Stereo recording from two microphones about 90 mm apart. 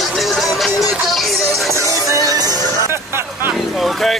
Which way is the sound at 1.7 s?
35° right (ahead or behind).